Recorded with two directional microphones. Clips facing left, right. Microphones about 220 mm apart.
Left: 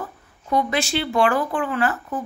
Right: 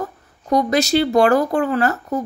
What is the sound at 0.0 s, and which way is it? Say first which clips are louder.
Speech: right 6 dB; 40° right (ahead or behind).